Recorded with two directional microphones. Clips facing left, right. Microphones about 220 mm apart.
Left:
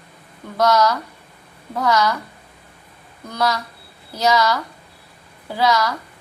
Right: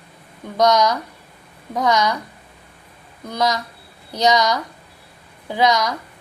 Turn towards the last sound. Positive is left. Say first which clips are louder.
# right 1 dB
turn(degrees=-20)  # may be behind; listen again after turning